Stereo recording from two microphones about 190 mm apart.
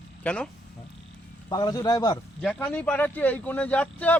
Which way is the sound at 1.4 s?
20° left (ahead or behind).